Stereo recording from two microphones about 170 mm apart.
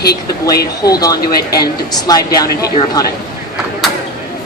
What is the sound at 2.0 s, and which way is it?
A woman's voice, 20° left (ahead or behind).